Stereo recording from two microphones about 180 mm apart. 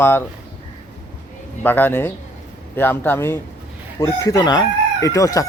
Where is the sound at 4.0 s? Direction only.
20° left (ahead or behind).